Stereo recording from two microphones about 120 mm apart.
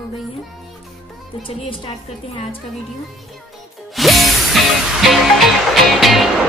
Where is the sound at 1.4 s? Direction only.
45° left (ahead or behind).